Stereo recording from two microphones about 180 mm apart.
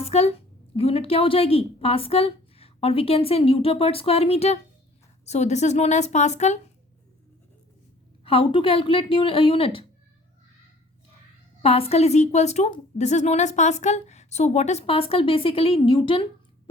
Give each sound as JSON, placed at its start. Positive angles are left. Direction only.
{"t": 0.0, "sound": "a woman's voice", "side_deg": 35}
{"t": 8.2, "sound": "a woman's voice", "side_deg": 30}
{"t": 11.6, "sound": "a woman's voice", "side_deg": 35}